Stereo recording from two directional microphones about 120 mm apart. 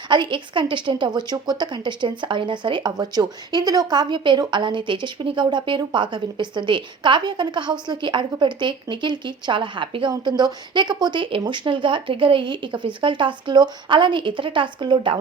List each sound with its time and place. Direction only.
0.1 s a woman's voice: 40° right (ahead or behind)